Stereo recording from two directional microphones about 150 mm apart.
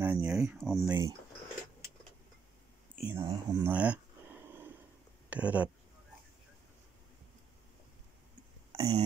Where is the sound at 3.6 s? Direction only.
10° right (ahead or behind).